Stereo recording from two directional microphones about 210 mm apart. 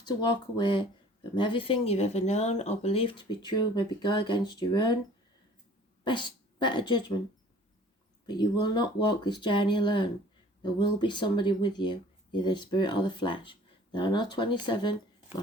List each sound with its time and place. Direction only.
0.0 s speech: 20° left (ahead or behind)
6.1 s speech: 20° left (ahead or behind)
8.3 s speech: 20° left (ahead or behind)